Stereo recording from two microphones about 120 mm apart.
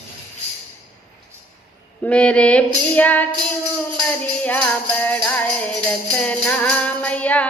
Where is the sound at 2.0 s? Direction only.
10° left (ahead or behind).